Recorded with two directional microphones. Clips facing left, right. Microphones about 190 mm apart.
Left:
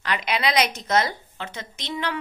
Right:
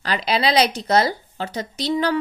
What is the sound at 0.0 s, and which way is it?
A woman's voice, 35° right (ahead or behind).